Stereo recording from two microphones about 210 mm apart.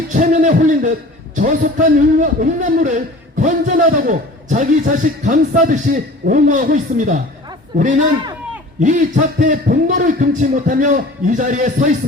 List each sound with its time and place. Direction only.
0.1 s a man's voice: 35° right (ahead or behind)